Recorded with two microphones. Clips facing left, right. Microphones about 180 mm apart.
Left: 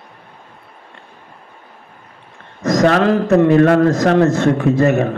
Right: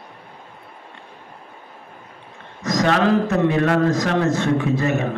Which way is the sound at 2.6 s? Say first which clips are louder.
Left 6 dB; 50° left (ahead or behind).